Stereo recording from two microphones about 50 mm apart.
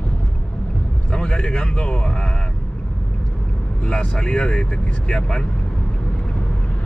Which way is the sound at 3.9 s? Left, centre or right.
Centre.